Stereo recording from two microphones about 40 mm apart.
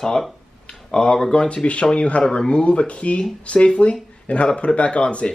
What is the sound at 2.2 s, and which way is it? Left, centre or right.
Speech, centre.